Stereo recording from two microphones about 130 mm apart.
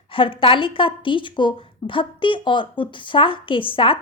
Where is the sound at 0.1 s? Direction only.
40° left (ahead or behind).